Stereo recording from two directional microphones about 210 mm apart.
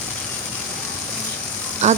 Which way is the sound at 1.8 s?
35° right (ahead or behind).